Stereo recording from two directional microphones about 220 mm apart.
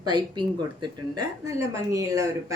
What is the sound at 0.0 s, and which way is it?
Speech, 20° right (ahead or behind).